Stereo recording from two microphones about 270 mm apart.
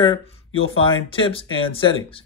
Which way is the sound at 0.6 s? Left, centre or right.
Centre.